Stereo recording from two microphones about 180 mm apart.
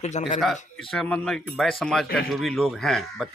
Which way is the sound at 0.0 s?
40° left (ahead or behind).